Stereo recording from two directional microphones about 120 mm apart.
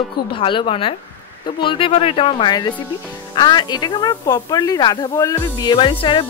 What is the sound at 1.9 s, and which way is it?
Speech, 55° left (ahead or behind).